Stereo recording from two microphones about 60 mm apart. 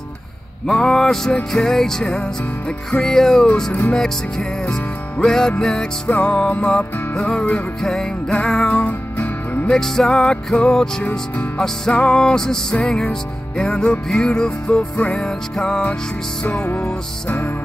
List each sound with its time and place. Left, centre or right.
0.7 s music: centre
8.6 s music: left
9.7 s music: centre